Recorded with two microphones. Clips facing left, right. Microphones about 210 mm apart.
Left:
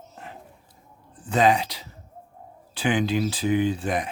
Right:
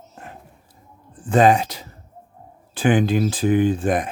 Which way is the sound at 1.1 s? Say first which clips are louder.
Right 5 dB; 50° right (ahead or behind).